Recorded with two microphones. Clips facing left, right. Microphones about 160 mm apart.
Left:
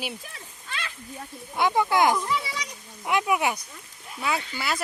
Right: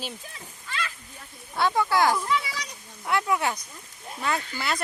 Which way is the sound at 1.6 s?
15° left (ahead or behind).